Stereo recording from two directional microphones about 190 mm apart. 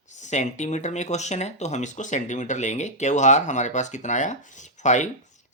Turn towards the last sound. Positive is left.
turn(degrees=40)  # may be behind; listen again after turning